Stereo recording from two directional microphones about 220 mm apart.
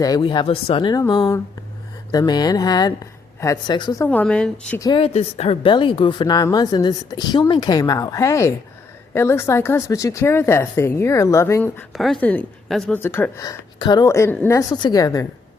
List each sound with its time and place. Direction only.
0.0 s speech: 20° left (ahead or behind)
4.8 s speech: 20° left (ahead or behind)